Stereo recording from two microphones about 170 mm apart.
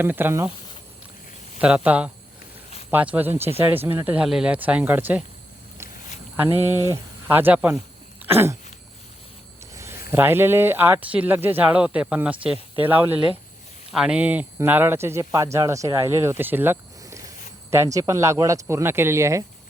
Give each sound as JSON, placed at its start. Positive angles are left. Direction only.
{"t": 0.0, "sound": "speech", "side_deg": -10}
{"t": 1.6, "sound": "speech", "side_deg": -5}
{"t": 6.7, "sound": "speech", "side_deg": -15}
{"t": 8.2, "sound": "cough", "side_deg": -15}
{"t": 9.7, "sound": "a sound", "side_deg": -15}
{"t": 10.1, "sound": "speech", "side_deg": -15}